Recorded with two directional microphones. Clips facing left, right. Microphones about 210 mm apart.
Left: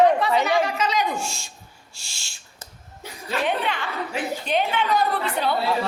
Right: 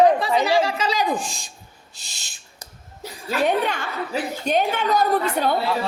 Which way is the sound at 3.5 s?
45° right (ahead or behind).